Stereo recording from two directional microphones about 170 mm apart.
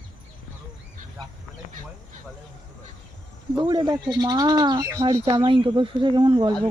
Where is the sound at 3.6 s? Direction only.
30° right (ahead or behind).